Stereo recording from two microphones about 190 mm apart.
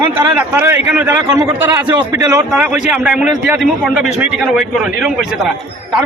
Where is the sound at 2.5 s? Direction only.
5° right (ahead or behind).